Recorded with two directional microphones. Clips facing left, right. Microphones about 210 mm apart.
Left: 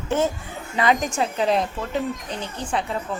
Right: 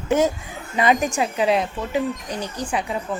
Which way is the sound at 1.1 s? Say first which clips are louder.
Right 1 dB; 5° right (ahead or behind).